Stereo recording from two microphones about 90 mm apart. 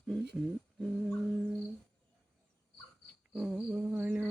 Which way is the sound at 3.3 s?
Centre (ahead or behind).